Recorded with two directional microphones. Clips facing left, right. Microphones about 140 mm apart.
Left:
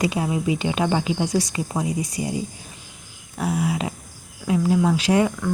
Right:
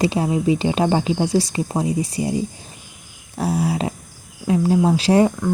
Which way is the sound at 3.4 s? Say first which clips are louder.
Right 3 dB; 35° right (ahead or behind).